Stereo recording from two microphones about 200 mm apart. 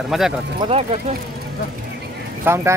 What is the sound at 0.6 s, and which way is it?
Speech, 30° right (ahead or behind).